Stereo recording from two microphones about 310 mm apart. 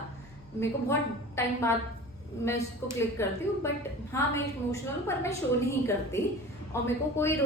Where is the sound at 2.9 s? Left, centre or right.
Centre.